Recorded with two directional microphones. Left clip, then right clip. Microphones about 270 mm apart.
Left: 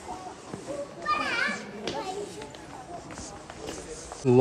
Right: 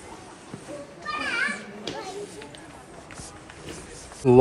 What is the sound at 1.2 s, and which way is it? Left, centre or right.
Children playing, left.